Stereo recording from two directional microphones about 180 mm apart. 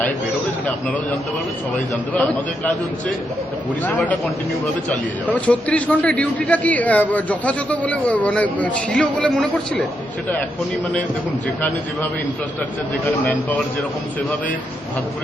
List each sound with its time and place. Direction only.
3.8 s a man's voice: 10° left (ahead or behind)